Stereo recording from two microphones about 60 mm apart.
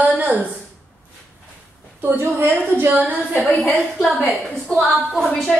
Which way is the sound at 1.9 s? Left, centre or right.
Right.